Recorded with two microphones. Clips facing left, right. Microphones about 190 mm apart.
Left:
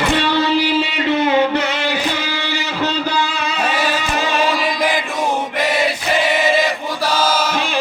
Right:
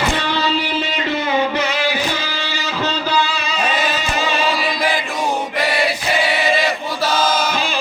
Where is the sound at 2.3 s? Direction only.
65° left (ahead or behind).